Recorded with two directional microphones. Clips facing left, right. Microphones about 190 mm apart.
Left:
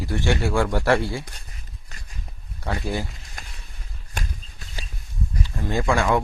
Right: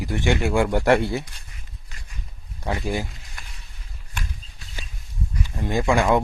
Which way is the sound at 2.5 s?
15° right (ahead or behind).